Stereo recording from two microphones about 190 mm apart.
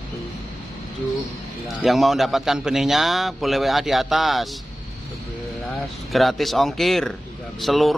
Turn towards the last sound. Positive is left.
turn(degrees=0)  # may be behind; listen again after turning